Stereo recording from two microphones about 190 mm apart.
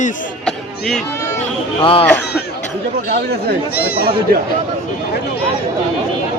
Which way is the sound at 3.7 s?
55° left (ahead or behind).